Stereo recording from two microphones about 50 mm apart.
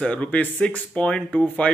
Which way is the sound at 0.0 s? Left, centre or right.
Left.